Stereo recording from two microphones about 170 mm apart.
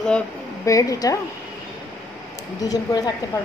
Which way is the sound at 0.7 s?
20° left (ahead or behind).